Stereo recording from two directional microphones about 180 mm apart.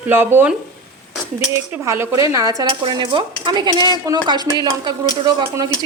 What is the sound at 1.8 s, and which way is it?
Speech, 15° right (ahead or behind).